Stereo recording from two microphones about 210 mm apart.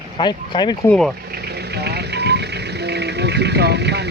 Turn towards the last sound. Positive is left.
turn(degrees=-55)  # may be behind; listen again after turning